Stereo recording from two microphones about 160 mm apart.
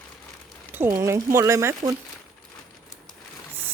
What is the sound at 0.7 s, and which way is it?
Speech, 15° right (ahead or behind).